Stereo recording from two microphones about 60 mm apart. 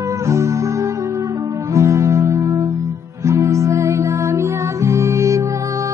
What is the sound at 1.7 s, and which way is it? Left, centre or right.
Music, right.